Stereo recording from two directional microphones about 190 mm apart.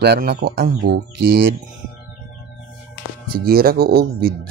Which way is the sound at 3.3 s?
50° right (ahead or behind).